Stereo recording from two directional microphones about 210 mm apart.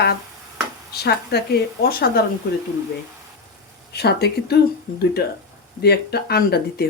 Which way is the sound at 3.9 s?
50° left (ahead or behind).